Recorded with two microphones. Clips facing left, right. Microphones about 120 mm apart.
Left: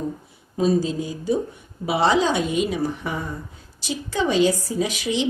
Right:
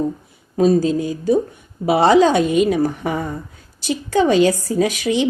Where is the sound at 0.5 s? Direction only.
55° right (ahead or behind).